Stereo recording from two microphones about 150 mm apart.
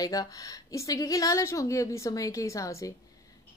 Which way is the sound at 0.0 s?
25° left (ahead or behind).